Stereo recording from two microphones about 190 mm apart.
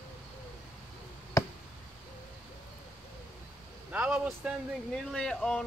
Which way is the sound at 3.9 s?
5° right (ahead or behind).